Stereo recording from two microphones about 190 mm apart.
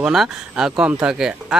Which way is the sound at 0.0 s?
5° right (ahead or behind).